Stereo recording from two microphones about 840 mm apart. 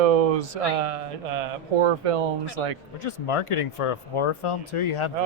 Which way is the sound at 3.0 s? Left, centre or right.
Left.